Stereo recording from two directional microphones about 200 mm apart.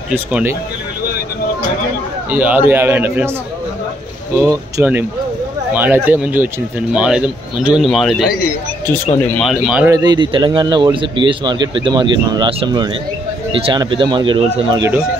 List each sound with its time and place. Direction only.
0.1 s a man's voice: 10° right (ahead or behind)
2.3 s a man's voice: 10° right (ahead or behind)
4.4 s a man's voice: 15° right (ahead or behind)
9.4 s speech: centre (ahead or behind)
9.8 s speech: 20° right (ahead or behind)